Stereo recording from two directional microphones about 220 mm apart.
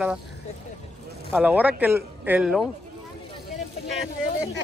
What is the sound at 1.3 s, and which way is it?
Speech, 5° right (ahead or behind).